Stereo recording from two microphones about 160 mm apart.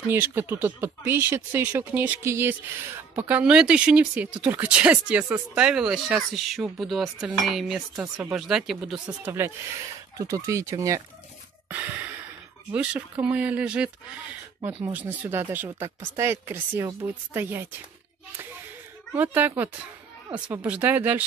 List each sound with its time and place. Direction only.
0.0 s speech: 15° right (ahead or behind)
9.2 s speech: 15° right (ahead or behind)
11.7 s gasp: 10° right (ahead or behind)
12.7 s speech: 10° right (ahead or behind)
19.1 s speech: 10° right (ahead or behind)